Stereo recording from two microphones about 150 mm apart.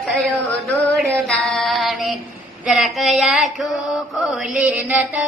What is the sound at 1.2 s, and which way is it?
Female singing, centre (ahead or behind).